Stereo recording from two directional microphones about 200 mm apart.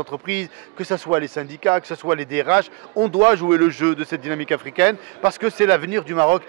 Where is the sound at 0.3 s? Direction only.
10° right (ahead or behind).